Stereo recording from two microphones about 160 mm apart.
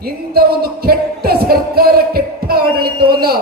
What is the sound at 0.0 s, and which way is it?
Music, 70° right (ahead or behind).